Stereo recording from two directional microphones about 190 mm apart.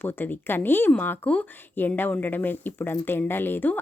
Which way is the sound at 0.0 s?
10° left (ahead or behind).